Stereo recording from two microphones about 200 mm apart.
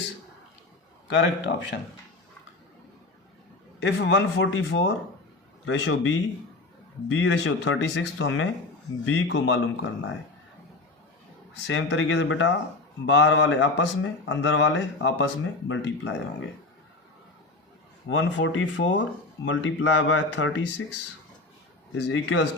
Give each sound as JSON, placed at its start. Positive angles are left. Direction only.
{"t": 1.1, "sound": "speech", "side_deg": 65}
{"t": 3.8, "sound": "speech", "side_deg": 60}
{"t": 5.6, "sound": "speech", "side_deg": 75}
{"t": 11.7, "sound": "speech", "side_deg": 75}
{"t": 18.1, "sound": "speech", "side_deg": 70}
{"t": 21.9, "sound": "speech", "side_deg": 75}